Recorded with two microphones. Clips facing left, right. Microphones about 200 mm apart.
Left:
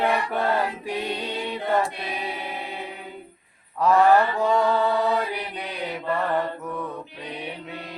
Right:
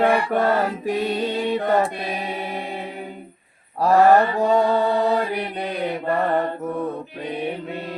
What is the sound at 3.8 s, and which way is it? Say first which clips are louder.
Mantra: right 3 dB; 40° right (ahead or behind).